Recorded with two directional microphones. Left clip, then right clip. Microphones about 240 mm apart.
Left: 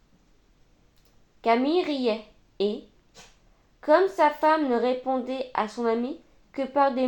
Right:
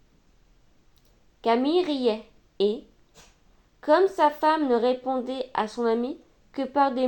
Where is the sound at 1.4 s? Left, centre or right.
Right.